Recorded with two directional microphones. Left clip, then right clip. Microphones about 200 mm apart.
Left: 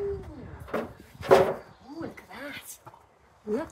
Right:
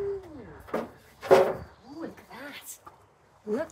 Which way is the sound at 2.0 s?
Centre (ahead or behind).